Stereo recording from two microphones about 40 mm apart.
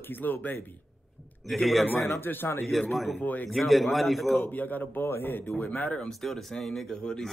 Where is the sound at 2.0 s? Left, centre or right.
Left.